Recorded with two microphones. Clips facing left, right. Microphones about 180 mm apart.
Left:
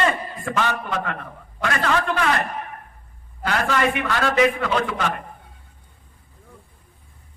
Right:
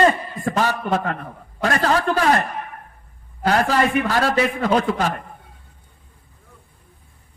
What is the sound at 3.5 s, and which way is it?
A man's voice, 35° right (ahead or behind).